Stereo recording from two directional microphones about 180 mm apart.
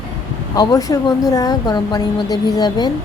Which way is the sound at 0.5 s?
20° left (ahead or behind).